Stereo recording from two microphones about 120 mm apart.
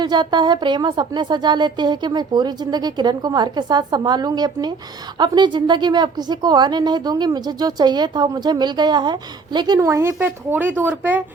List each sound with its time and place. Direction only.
0.0 s a woman's voice: 40° right (ahead or behind); by 11.2 s 15° right (ahead or behind)